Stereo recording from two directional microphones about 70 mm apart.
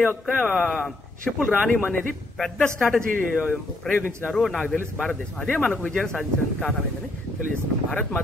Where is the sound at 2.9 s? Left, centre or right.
Left.